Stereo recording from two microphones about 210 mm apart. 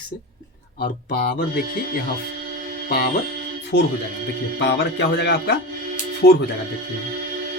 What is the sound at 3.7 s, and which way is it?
Speech, 55° left (ahead or behind).